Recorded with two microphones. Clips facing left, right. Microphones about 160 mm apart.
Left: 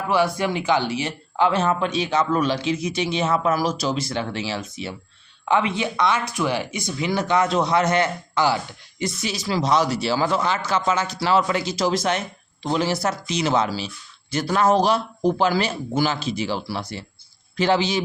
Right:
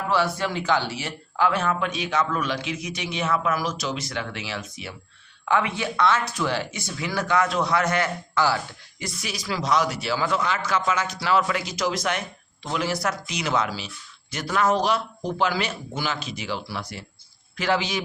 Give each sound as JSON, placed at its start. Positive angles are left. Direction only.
{"t": 0.1, "sound": "a man's voice", "side_deg": 15}